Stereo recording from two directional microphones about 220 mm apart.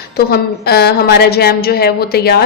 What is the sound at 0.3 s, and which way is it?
A woman's voice, 45° left (ahead or behind).